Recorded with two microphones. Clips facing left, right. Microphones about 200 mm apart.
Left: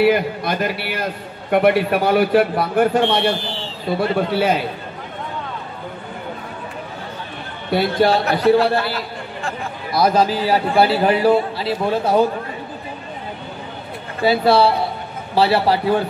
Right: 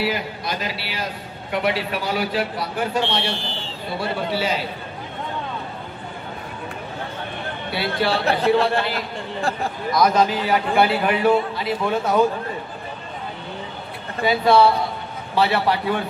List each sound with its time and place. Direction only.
0.0 s a man's voice: 55° left (ahead or behind)
7.7 s a man's voice: 40° left (ahead or behind)
9.8 s a man's voice: 30° left (ahead or behind)
14.2 s a man's voice: 35° left (ahead or behind)